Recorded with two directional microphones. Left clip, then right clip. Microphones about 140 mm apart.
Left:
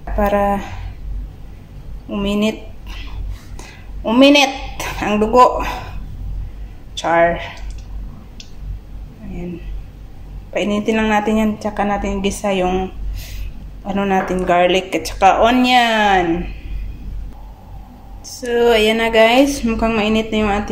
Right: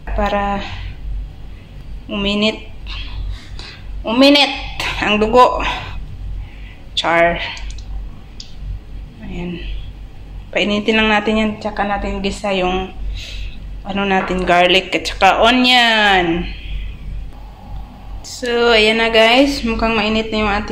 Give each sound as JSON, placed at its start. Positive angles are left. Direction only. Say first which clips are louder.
{"t": 0.2, "sound": "a woman's voice", "louder": "left 2 dB", "side_deg": 25}
{"t": 2.0, "sound": "speech", "louder": "right 2 dB", "side_deg": 15}
{"t": 3.5, "sound": "a sound", "louder": "right 3 dB", "side_deg": 40}
{"t": 4.7, "sound": "speech", "louder": "right 6 dB", "side_deg": 20}
{"t": 7.0, "sound": "speech", "louder": "right 1 dB", "side_deg": 10}
{"t": 10.5, "sound": "speech", "louder": "right 3 dB", "side_deg": 10}
{"t": 11.6, "sound": "a woman's voice", "louder": "even", "side_deg": 30}
{"t": 13.8, "sound": "speech", "louder": "right 1 dB", "side_deg": 20}
{"t": 18.4, "sound": "a woman's voice", "louder": "right 1 dB", "side_deg": 20}